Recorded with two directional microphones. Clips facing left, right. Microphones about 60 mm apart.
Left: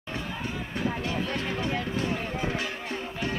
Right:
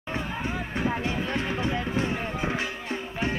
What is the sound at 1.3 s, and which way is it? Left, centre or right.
Music, right.